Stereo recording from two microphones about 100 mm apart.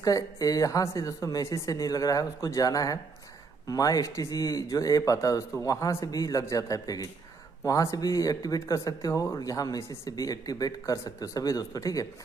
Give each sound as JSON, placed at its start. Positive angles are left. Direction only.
{"t": 0.0, "sound": "speech", "side_deg": 35}